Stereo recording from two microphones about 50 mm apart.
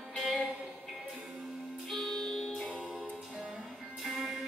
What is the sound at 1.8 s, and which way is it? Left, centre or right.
Music, centre.